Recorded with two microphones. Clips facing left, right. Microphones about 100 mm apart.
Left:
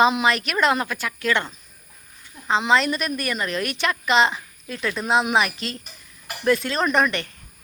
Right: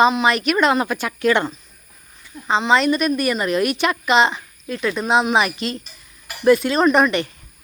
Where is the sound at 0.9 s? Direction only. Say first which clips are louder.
Right 5 dB; 20° right (ahead or behind).